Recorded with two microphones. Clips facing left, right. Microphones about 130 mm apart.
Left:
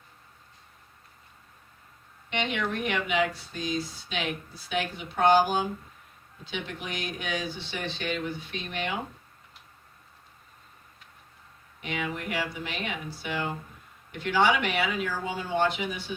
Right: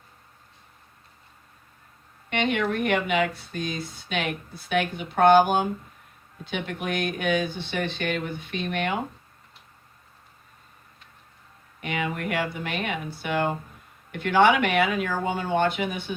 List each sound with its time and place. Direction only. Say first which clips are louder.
2.3 s speech: right 5 dB; 50° right (ahead or behind)
11.8 s speech: right 4 dB; 55° right (ahead or behind)